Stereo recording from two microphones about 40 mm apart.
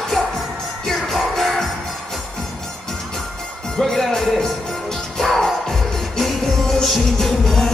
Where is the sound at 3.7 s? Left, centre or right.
Centre.